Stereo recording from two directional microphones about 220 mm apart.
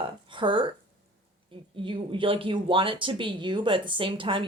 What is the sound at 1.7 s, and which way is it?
Speech, 25° right (ahead or behind).